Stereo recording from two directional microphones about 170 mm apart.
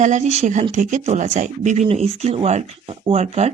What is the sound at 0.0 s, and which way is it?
Speech, 45° right (ahead or behind).